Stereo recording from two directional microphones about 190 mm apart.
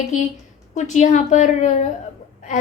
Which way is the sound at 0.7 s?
40° left (ahead or behind).